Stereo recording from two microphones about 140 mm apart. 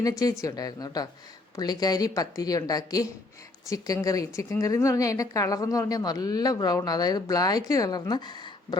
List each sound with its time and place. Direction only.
0.0 s speech: 25° left (ahead or behind)